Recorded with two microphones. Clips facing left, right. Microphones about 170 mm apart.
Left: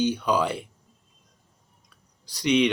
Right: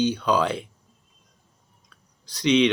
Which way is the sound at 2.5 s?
15° left (ahead or behind).